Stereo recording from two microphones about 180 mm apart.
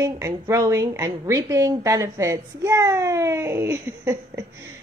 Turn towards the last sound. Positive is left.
turn(degrees=-15)  # may be behind; listen again after turning